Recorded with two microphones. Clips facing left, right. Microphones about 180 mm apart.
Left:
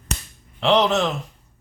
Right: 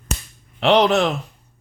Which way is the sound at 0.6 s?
70° right (ahead or behind).